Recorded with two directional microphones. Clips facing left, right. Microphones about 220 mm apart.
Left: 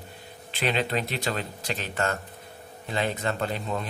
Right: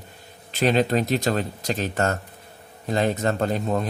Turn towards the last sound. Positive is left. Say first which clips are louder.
# right 6 dB
turn(degrees=-45)  # may be behind; listen again after turning